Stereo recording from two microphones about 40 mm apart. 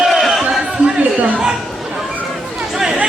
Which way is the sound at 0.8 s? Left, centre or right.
Right.